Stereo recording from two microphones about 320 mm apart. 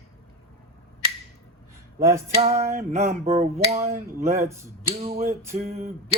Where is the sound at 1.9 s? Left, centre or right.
Centre.